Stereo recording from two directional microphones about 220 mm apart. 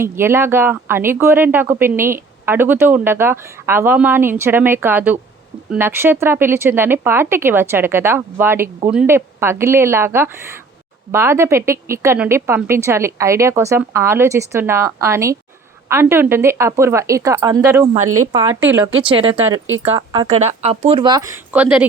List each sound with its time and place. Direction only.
0.0 s speech: 10° right (ahead or behind)
18.0 s speech: 80° right
18.3 s speech: 10° right (ahead or behind)
19.0 s speech: 25° right (ahead or behind)
19.5 s speech: 65° right (ahead or behind)
19.8 s speech: 25° right (ahead or behind); by 21.8 s 5° right (ahead or behind)